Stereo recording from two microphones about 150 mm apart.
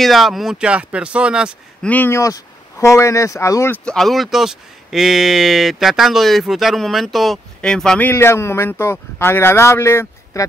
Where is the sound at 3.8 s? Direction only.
5° left (ahead or behind).